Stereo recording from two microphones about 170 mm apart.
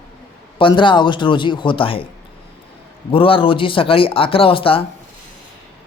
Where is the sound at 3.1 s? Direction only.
30° left (ahead or behind).